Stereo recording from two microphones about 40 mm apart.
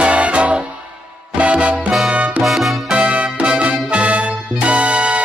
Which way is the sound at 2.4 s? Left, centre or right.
Centre.